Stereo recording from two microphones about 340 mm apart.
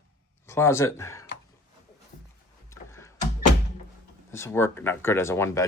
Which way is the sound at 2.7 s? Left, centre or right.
Centre.